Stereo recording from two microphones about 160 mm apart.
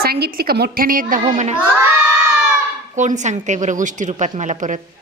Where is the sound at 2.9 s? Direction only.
50° right (ahead or behind).